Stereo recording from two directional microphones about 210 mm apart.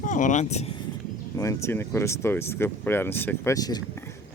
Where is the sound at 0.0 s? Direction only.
35° left (ahead or behind).